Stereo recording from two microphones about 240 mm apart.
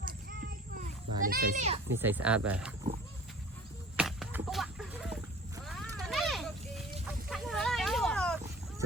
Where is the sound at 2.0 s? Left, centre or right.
Centre.